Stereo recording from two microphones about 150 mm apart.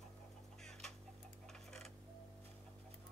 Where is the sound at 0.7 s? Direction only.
5° left (ahead or behind).